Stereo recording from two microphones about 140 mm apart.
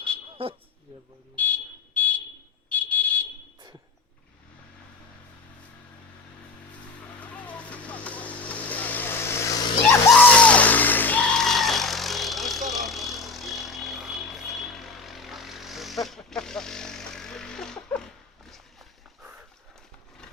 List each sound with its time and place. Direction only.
0.4 s speech: 40° right (ahead or behind)
1.4 s vehicle: 10° left (ahead or behind)
7.2 s vehicle: 10° left (ahead or behind); by 10.0 s 25° left (ahead or behind)
10.1 s music: 10° left (ahead or behind)
18.4 s walk: centre (ahead or behind)
19.2 s horse: 10° right (ahead or behind)